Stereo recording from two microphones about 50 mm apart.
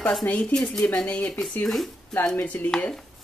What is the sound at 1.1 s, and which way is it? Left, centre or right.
Speech, left.